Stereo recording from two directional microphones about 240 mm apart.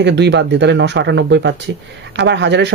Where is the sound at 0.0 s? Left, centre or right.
Right.